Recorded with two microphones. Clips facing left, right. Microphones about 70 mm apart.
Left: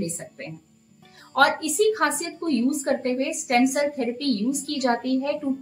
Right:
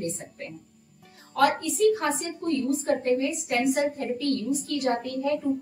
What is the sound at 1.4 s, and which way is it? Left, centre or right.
Speech, left.